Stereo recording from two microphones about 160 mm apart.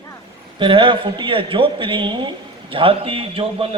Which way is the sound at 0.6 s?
30° right (ahead or behind).